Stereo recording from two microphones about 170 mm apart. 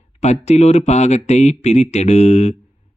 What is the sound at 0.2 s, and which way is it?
Speech, 40° left (ahead or behind).